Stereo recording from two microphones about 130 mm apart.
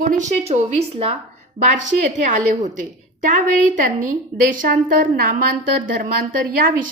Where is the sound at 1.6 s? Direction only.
65° right (ahead or behind).